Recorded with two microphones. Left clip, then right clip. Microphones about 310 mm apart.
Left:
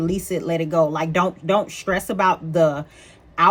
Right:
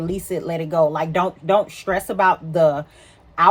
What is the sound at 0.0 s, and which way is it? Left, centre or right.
Speech, centre.